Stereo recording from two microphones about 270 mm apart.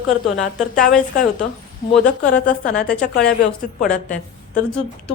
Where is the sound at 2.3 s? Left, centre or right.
Left.